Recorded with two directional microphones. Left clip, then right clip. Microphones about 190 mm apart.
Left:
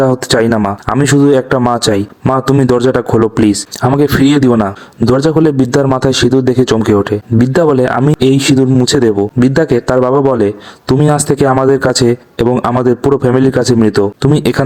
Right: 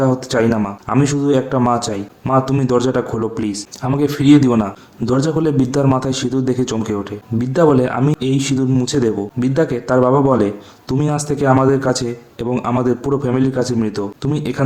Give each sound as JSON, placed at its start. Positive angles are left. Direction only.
{"t": 0.3, "sound": "a man's voice", "side_deg": 45}